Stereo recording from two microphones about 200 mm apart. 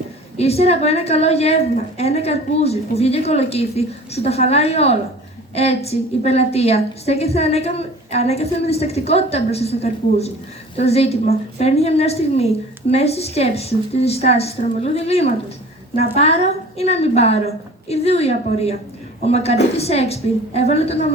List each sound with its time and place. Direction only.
0.3 s a woman's voice: 30° left (ahead or behind)